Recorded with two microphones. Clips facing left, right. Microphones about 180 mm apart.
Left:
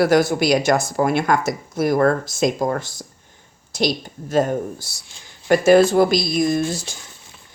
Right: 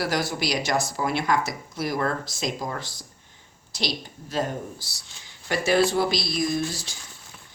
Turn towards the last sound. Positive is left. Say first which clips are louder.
# left 6 dB
turn(degrees=50)  # may be behind; listen again after turning